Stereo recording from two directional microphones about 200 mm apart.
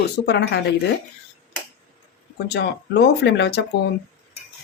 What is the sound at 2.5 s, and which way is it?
Speech, 55° left (ahead or behind).